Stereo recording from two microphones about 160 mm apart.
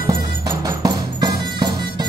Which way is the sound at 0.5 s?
20° right (ahead or behind).